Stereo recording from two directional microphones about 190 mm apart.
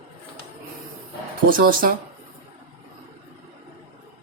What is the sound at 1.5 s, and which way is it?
Speech, 50° right (ahead or behind).